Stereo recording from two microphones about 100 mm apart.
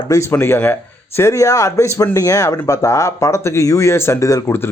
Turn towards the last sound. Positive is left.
turn(degrees=30)  # may be behind; listen again after turning